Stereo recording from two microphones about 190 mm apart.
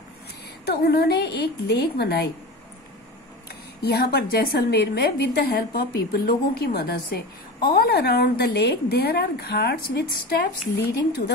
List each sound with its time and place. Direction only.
0.7 s a woman's voice: 60° left (ahead or behind)
3.4 s a woman's voice: 55° left (ahead or behind)